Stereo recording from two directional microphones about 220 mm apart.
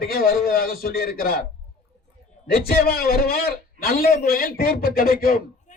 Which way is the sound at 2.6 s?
45° left (ahead or behind).